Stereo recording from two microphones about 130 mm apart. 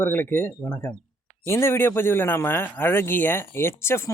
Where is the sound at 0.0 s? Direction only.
15° left (ahead or behind).